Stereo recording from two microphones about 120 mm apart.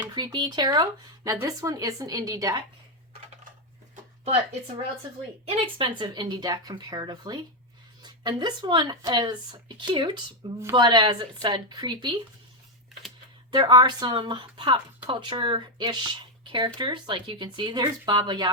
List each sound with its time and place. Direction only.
0.1 s speech: 35° right (ahead or behind)
5.6 s speech: 45° right (ahead or behind)
13.5 s speech: 35° right (ahead or behind)